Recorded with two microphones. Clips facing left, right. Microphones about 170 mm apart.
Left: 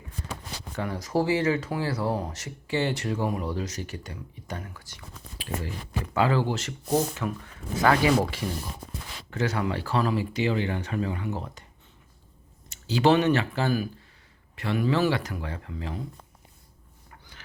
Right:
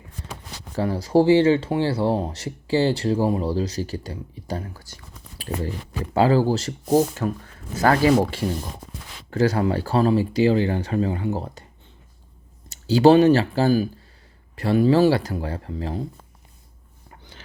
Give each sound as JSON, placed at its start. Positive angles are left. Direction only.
{"t": 0.8, "sound": "speech", "side_deg": -30}
{"t": 6.1, "sound": "speech", "side_deg": -35}
{"t": 12.6, "sound": "speech", "side_deg": -35}
{"t": 17.1, "sound": "a sound", "side_deg": -30}